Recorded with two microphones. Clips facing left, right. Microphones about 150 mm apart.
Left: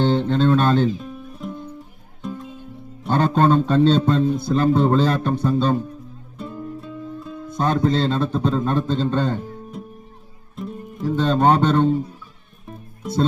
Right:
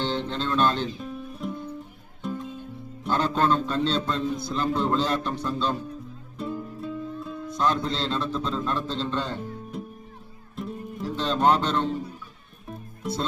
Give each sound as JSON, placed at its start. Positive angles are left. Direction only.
{"t": 0.0, "sound": "a man's voice", "side_deg": 50}
{"t": 1.4, "sound": "music", "side_deg": 0}
{"t": 3.2, "sound": "a man's voice", "side_deg": 55}
{"t": 6.4, "sound": "music", "side_deg": 0}
{"t": 7.5, "sound": "a man's voice", "side_deg": 55}
{"t": 9.7, "sound": "music", "side_deg": 0}
{"t": 11.1, "sound": "a man's voice", "side_deg": 50}